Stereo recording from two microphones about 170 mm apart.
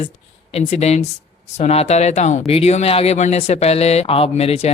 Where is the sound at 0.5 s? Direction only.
40° left (ahead or behind).